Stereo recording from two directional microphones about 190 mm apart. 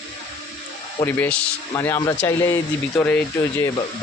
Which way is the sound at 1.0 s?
10° left (ahead or behind).